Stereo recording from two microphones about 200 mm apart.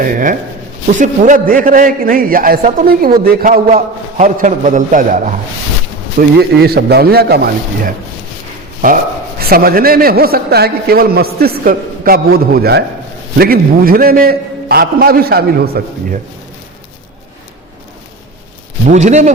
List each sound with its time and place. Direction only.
0.0 s a man's voice: 45° right (ahead or behind)
6.1 s a man's voice: 55° right (ahead or behind)
9.5 s a man's voice: 50° right (ahead or behind)
18.9 s speech: 35° right (ahead or behind)